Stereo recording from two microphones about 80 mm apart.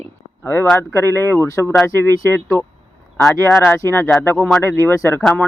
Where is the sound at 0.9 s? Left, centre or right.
Left.